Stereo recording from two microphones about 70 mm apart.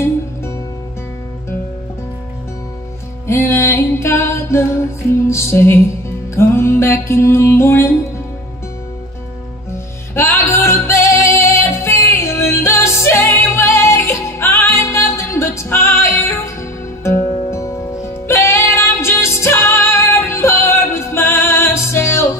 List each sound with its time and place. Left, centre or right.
3.3 s music: left
10.1 s music: left